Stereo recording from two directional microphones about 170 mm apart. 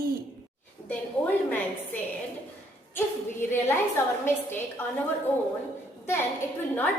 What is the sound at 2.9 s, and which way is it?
Speech, 15° left (ahead or behind).